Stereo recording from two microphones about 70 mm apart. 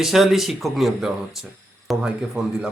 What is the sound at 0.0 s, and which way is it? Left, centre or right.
Speech, centre.